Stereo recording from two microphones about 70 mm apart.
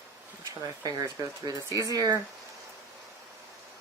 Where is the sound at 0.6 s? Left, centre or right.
Right.